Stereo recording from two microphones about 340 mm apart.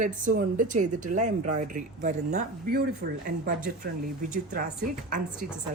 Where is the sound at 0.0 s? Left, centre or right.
Right.